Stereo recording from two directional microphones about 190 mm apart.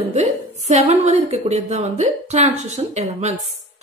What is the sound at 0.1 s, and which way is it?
A woman's voice, 35° right (ahead or behind).